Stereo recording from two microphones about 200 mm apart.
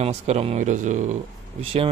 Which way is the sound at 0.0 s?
30° right (ahead or behind).